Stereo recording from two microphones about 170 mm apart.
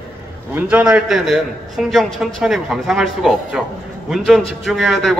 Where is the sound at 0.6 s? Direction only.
5° right (ahead or behind).